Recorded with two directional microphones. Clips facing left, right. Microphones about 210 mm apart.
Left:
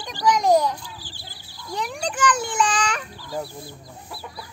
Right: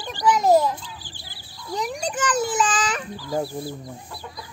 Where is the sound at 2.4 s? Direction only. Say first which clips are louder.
Right 1 dB; 5° right (ahead or behind).